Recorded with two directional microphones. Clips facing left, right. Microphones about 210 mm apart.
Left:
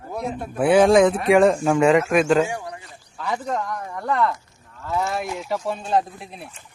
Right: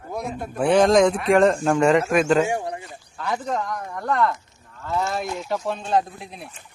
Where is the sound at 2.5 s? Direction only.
25° right (ahead or behind).